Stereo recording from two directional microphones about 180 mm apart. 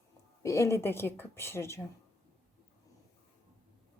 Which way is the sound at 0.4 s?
15° left (ahead or behind).